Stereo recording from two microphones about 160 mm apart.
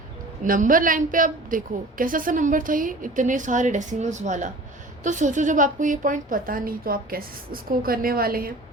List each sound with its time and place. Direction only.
0.4 s a woman's voice: 60° right (ahead or behind)